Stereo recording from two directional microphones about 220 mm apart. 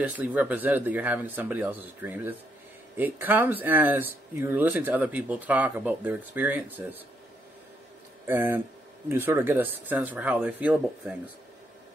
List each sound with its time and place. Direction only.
0.0 s speech: 5° right (ahead or behind)
8.3 s speech: 10° right (ahead or behind)